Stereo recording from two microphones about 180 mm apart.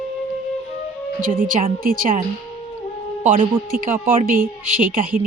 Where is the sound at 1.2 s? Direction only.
50° right (ahead or behind).